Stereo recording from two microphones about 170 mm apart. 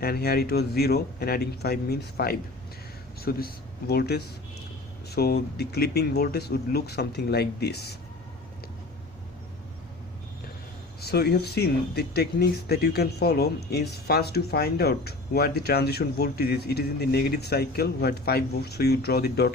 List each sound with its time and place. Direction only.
0.0 s speech: 65° left (ahead or behind)
11.0 s speech: 70° left (ahead or behind)